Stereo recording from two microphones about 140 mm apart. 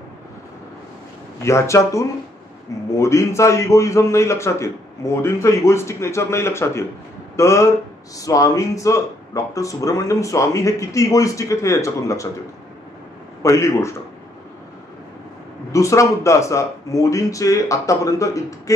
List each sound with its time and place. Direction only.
1.4 s speech: 20° left (ahead or behind)
13.4 s speech: 20° left (ahead or behind)
15.7 s speech: 20° left (ahead or behind)